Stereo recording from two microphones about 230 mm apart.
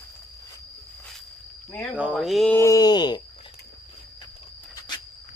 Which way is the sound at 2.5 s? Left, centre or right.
Centre.